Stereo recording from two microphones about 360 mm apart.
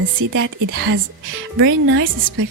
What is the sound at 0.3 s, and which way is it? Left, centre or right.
A woman's voice, right.